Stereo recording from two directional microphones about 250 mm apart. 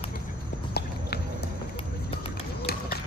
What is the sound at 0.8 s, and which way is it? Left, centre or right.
Clip-clop, left.